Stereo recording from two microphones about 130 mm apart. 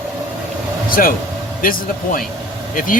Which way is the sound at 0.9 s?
90° left.